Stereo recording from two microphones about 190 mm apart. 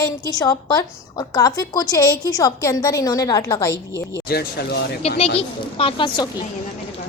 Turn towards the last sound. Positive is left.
turn(degrees=25)  # may be behind; listen again after turning